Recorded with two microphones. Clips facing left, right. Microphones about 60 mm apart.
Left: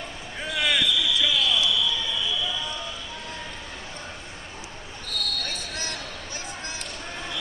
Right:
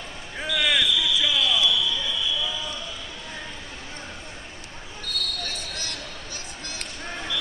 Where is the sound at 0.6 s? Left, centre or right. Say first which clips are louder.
Right 1 dB; centre.